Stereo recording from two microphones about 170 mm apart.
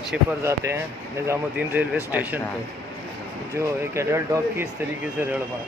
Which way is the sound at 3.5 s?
15° right (ahead or behind).